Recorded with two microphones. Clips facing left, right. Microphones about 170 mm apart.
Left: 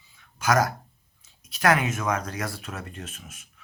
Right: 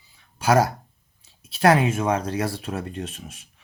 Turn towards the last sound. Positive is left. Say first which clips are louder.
# right 8 dB
turn(degrees=-35)  # may be behind; listen again after turning